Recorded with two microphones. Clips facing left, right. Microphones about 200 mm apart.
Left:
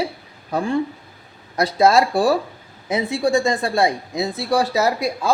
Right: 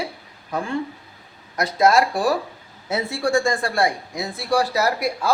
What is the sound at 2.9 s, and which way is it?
A man's voice, 15° left (ahead or behind).